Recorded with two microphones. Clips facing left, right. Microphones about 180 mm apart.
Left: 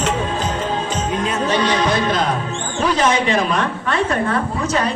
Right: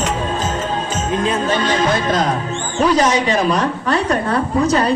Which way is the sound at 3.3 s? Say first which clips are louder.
Right 2 dB; 40° right (ahead or behind).